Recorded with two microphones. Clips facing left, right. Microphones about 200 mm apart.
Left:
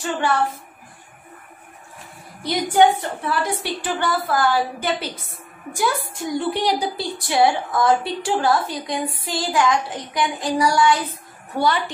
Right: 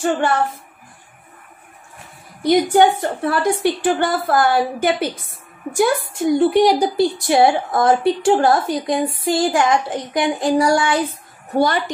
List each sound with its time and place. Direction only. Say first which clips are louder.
2.4 s a woman's voice: right 3 dB; 50° right (ahead or behind)